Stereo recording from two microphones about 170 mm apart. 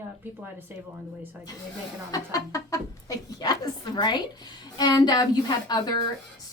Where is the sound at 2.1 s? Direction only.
20° left (ahead or behind).